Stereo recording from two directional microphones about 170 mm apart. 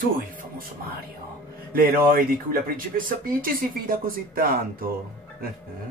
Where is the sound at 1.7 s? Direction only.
60° right (ahead or behind).